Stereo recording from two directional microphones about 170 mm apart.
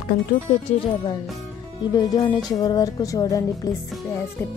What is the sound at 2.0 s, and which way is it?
Music, 20° left (ahead or behind).